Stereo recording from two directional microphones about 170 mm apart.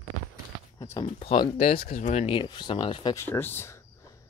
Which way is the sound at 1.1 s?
30° left (ahead or behind).